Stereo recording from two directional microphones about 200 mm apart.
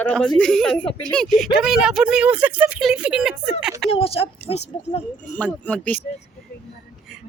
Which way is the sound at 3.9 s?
30° left (ahead or behind).